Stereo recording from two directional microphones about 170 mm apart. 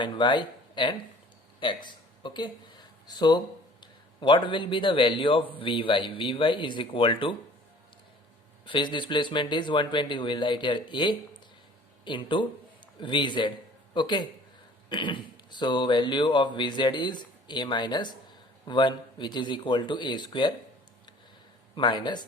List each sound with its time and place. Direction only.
0.0 s speech: 25° left (ahead or behind)
8.6 s speech: 30° left (ahead or behind)
21.8 s speech: 25° left (ahead or behind)